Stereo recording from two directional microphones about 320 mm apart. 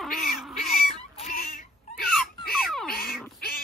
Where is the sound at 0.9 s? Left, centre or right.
Left.